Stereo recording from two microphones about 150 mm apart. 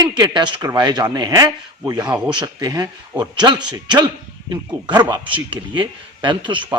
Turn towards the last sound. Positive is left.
turn(degrees=-30)  # may be behind; listen again after turning